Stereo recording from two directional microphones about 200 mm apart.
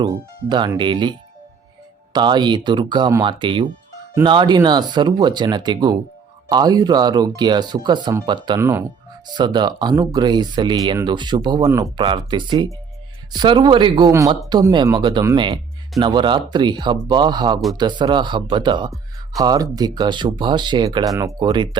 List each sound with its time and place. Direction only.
0.0 s speech: 20° right (ahead or behind)
2.1 s speech: 20° right (ahead or behind)